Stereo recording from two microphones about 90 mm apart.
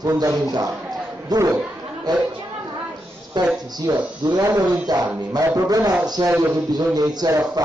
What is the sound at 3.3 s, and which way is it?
Speech, 50° right (ahead or behind).